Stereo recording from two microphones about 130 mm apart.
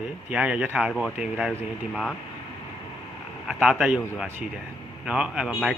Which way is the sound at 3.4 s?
5° right (ahead or behind).